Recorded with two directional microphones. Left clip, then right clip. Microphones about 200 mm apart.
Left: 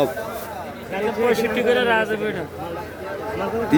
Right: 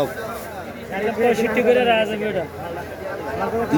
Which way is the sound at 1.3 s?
40° left (ahead or behind).